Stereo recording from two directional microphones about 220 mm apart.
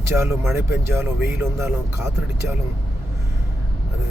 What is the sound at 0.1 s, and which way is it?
Speech, 10° right (ahead or behind).